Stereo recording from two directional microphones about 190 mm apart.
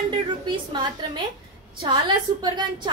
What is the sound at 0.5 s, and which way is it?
A woman's voice, 25° right (ahead or behind).